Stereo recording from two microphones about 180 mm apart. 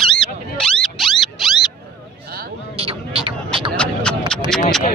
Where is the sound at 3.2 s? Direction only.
30° right (ahead or behind).